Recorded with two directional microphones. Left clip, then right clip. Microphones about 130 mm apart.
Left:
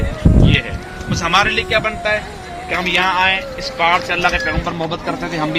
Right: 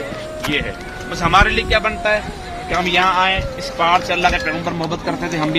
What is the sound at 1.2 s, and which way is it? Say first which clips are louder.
Speech: right 1 dB; 90° right.